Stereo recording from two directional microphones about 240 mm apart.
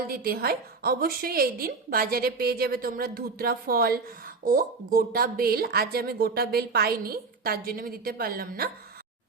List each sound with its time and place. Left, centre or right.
0.1 s speech: right